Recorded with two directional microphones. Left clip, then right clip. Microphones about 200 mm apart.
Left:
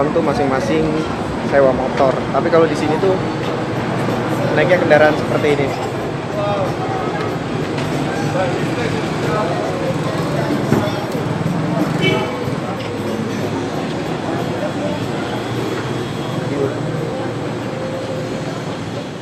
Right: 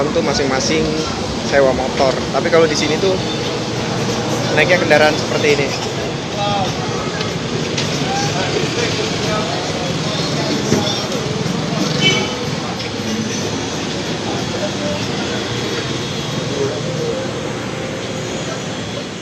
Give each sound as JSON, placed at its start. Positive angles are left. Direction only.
{"t": 0.3, "sound": "speech", "side_deg": 0}
{"t": 4.5, "sound": "speech", "side_deg": -5}